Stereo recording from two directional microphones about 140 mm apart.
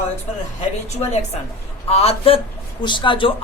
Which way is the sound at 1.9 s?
45° left (ahead or behind).